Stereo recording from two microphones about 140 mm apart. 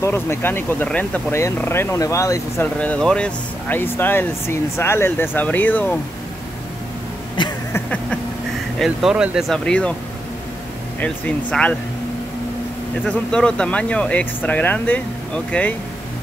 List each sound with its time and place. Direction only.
0.0 s speech: 20° left (ahead or behind)
7.4 s a sound: 35° left (ahead or behind)
7.7 s a sound: 10° left (ahead or behind)
8.7 s speech: centre (ahead or behind)
11.0 s speech: 10° left (ahead or behind)
13.0 s speech: 5° left (ahead or behind)